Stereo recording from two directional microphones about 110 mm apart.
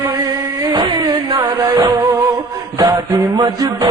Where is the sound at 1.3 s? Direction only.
35° right (ahead or behind).